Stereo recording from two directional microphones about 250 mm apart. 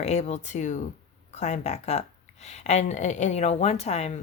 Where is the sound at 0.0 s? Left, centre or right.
Left.